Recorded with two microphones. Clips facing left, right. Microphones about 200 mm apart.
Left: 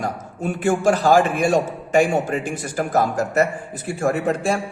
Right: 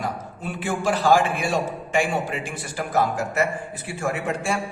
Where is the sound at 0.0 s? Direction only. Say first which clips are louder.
Left 4 dB; 45° left (ahead or behind).